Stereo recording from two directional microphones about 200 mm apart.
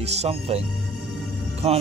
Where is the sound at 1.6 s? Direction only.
30° right (ahead or behind).